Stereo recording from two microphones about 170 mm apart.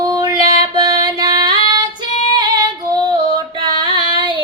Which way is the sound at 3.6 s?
25° right (ahead or behind).